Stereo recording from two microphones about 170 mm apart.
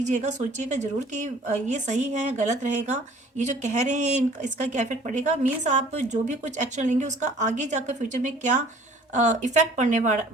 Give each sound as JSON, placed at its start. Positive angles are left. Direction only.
{"t": 0.0, "sound": "a woman's voice", "side_deg": -45}